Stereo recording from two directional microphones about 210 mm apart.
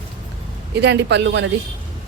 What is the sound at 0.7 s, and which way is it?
Speech, 55° right (ahead or behind).